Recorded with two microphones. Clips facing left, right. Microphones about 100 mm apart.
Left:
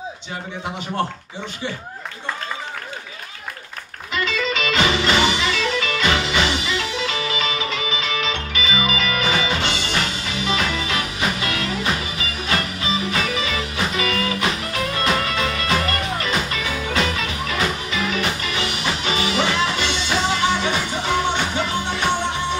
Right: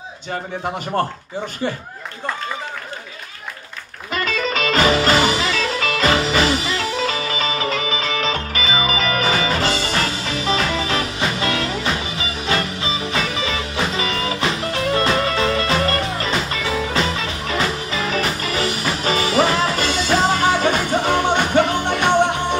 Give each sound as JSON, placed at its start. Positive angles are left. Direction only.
{"t": 4.1, "sound": "music", "side_deg": -45}